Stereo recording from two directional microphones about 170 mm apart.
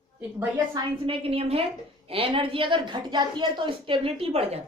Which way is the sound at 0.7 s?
35° right (ahead or behind).